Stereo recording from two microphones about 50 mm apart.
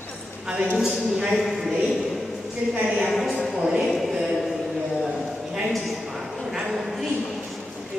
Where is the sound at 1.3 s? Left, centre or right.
Centre.